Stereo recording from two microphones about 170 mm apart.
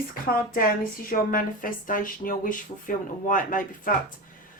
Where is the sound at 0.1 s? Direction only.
60° left (ahead or behind).